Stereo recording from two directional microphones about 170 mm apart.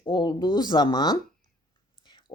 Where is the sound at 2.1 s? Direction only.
25° left (ahead or behind).